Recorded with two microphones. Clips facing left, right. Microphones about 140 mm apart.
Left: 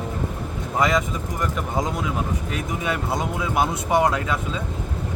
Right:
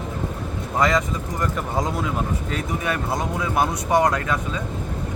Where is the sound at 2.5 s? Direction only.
15° left (ahead or behind).